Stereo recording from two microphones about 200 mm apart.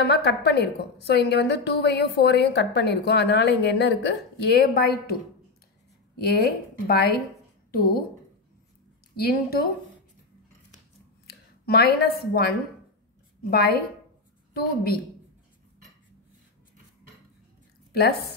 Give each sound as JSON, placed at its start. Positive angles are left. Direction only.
{"t": 0.0, "sound": "a woman's voice", "side_deg": 55}
{"t": 6.1, "sound": "a woman's voice", "side_deg": 50}
{"t": 9.1, "sound": "a woman's voice", "side_deg": 50}
{"t": 11.2, "sound": "a woman's voice", "side_deg": 55}
{"t": 17.9, "sound": "a woman's voice", "side_deg": 50}